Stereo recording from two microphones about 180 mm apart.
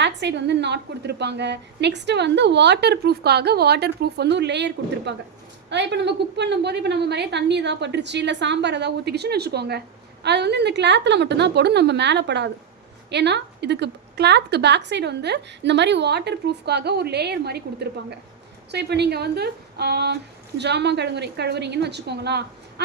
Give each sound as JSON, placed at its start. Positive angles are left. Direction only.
{"t": 0.0, "sound": "a woman's voice", "side_deg": -75}